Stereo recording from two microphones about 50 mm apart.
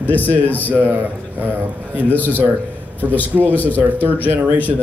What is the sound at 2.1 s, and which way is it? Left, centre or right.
Speech, left.